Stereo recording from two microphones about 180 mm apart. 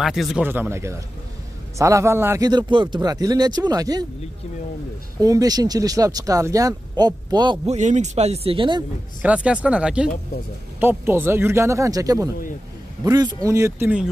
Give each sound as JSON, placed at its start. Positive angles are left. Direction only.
{"t": 0.0, "sound": "speech", "side_deg": 0}
{"t": 0.5, "sound": "speech", "side_deg": -15}
{"t": 5.2, "sound": "speech", "side_deg": -20}
{"t": 7.6, "sound": "speech", "side_deg": -40}
{"t": 9.2, "sound": "speech", "side_deg": -5}